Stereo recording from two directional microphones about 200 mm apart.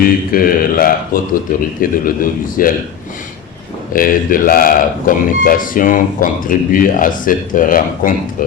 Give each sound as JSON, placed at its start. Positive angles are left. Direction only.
{"t": 0.0, "sound": "speech", "side_deg": 45}
{"t": 3.9, "sound": "speech", "side_deg": 45}